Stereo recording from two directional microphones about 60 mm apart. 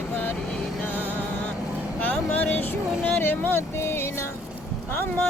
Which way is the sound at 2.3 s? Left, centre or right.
Left.